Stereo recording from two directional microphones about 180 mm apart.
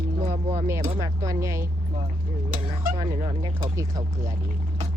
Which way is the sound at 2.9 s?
25° right (ahead or behind).